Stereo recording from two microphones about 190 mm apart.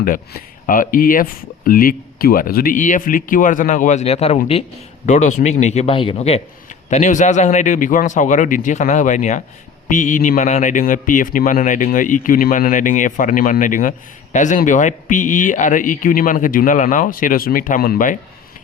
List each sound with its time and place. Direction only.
0.0 s speech: 45° left (ahead or behind)